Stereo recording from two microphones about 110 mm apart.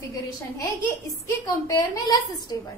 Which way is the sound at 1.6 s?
35° left (ahead or behind).